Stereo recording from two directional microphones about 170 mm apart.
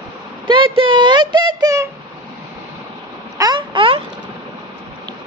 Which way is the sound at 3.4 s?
25° right (ahead or behind).